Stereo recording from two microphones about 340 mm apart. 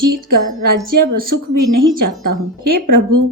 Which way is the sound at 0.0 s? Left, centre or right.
Right.